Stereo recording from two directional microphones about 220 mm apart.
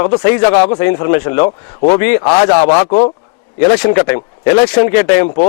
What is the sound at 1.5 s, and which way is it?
Speech, 30° left (ahead or behind).